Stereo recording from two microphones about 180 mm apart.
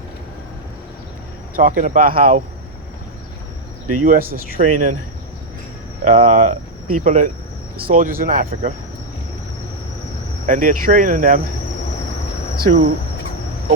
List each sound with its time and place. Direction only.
1.5 s speech: 45° right (ahead or behind)
4.0 s speech: 50° right (ahead or behind)
6.1 s speech: 45° right (ahead or behind)
10.4 s speech: 45° right (ahead or behind)
12.5 s speech: 55° right (ahead or behind)